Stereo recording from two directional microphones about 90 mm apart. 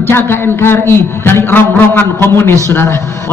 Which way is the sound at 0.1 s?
25° left (ahead or behind).